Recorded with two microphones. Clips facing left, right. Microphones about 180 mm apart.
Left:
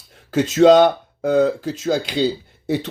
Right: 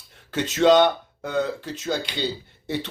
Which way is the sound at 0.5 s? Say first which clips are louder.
Left 5 dB; 45° left (ahead or behind).